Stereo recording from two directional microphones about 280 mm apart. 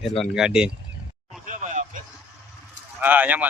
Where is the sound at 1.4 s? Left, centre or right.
Right.